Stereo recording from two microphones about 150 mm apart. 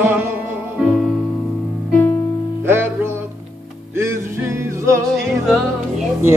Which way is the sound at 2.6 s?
15° right (ahead or behind).